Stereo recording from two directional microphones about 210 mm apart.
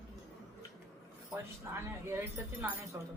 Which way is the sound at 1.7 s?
10° right (ahead or behind).